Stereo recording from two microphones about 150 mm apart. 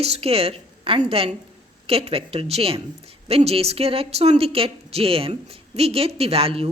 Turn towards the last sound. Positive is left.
turn(degrees=-40)  # may be behind; listen again after turning